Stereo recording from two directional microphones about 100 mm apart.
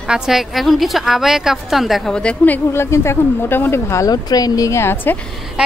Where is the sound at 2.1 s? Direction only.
10° left (ahead or behind).